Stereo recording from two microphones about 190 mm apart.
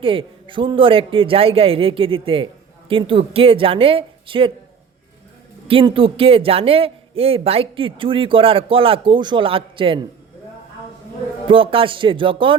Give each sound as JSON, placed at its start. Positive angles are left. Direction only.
{"t": 0.0, "sound": "a man's voice", "side_deg": -30}
{"t": 5.6, "sound": "a man's voice", "side_deg": -30}
{"t": 11.4, "sound": "a man's voice", "side_deg": -30}